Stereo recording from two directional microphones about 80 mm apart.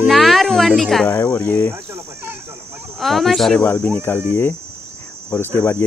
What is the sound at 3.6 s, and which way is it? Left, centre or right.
Speech, left.